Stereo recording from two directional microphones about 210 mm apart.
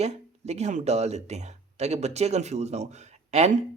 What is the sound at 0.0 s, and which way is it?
Speech, 30° right (ahead or behind).